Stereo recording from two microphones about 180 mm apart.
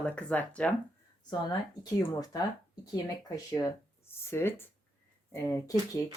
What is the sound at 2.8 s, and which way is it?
Speech, 20° left (ahead or behind).